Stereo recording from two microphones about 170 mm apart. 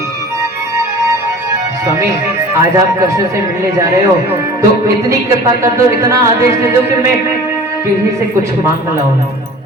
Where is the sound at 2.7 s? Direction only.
20° right (ahead or behind).